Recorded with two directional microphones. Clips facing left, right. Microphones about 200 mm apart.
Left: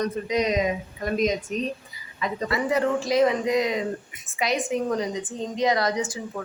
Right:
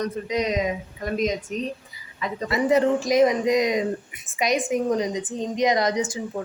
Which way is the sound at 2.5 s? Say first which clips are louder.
Right 5 dB; 20° right (ahead or behind).